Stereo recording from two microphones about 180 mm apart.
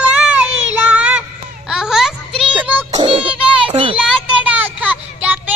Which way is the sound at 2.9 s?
30° right (ahead or behind).